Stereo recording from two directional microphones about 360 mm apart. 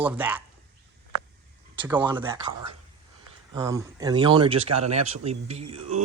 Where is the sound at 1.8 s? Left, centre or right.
Centre.